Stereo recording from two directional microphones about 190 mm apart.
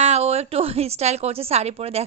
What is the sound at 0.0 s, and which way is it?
A woman's voice, 35° right (ahead or behind).